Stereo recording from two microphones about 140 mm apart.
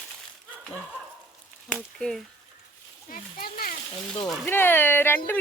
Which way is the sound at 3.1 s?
85° left.